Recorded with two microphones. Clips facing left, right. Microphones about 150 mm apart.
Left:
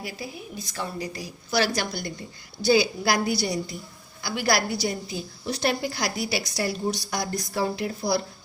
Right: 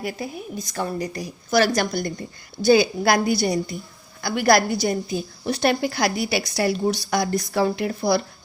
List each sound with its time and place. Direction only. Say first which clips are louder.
0.0 s a woman's voice: right 6 dB; 45° right (ahead or behind); by 8.2 s 65° right (ahead or behind)